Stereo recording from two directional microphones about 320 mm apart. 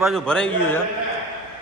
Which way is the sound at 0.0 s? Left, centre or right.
Centre.